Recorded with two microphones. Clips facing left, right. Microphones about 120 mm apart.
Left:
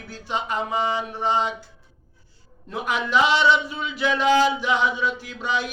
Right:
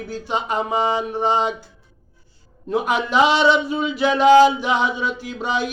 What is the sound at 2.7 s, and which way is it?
A man's voice, 20° right (ahead or behind).